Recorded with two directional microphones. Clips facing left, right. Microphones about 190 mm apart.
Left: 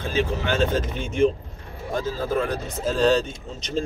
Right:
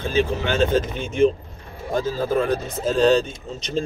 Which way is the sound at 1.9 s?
30° right (ahead or behind).